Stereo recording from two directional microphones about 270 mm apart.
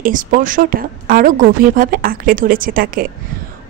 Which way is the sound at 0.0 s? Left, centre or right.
Right.